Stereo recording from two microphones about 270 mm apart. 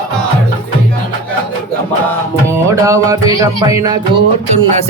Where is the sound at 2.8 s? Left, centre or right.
Centre.